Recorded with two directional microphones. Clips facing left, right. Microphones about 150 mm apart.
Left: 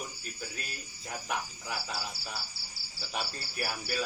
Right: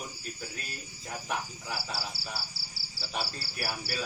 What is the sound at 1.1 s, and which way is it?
Speech, centre (ahead or behind).